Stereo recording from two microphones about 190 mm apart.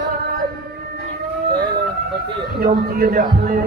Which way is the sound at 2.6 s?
50° right (ahead or behind).